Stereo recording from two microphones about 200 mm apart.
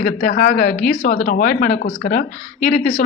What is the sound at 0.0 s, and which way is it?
A woman's voice, 40° left (ahead or behind).